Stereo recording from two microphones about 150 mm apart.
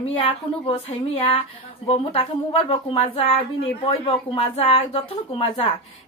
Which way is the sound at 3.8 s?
35° left (ahead or behind).